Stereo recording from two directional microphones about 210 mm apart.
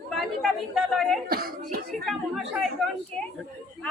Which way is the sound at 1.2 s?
45° right (ahead or behind).